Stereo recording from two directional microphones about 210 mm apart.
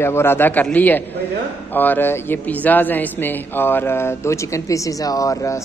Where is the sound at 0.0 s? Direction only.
10° left (ahead or behind).